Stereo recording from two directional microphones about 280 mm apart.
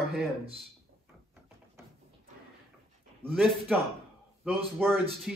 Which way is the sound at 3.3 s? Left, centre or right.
Centre.